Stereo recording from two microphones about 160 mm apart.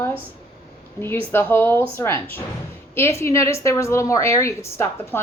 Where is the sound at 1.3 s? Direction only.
10° left (ahead or behind).